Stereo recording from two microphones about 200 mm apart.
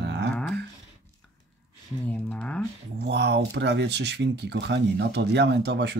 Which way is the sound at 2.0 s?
5° left (ahead or behind).